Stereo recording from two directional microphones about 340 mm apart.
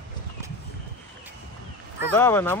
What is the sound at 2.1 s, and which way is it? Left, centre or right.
Speech, centre.